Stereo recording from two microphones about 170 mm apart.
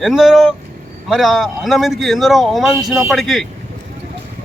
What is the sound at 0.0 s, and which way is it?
Speech, centre (ahead or behind).